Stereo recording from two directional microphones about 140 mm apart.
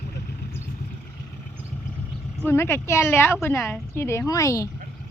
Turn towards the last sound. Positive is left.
turn(degrees=25)  # may be behind; listen again after turning